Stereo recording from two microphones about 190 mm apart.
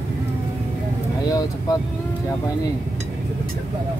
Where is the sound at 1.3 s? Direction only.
20° left (ahead or behind).